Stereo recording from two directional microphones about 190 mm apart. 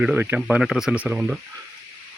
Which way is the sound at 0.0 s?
5° right (ahead or behind).